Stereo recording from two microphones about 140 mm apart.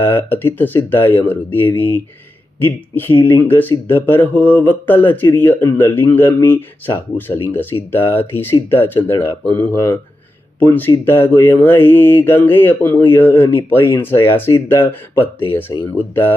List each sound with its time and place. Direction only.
0.0 s speech: 15° left (ahead or behind)